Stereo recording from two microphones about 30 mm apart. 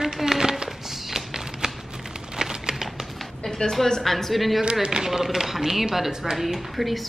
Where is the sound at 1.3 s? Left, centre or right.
Centre.